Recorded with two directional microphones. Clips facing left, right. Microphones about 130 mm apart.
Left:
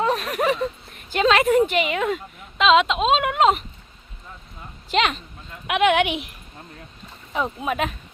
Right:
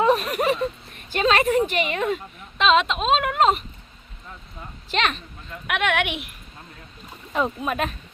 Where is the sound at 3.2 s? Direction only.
15° left (ahead or behind).